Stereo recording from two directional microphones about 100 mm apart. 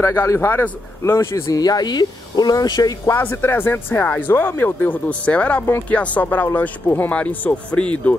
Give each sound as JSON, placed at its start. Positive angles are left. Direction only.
{"t": 0.0, "sound": "a man's voice", "side_deg": 30}
{"t": 3.2, "sound": "speech", "side_deg": 20}